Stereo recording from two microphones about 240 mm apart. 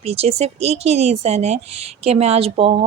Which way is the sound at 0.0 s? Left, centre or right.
Right.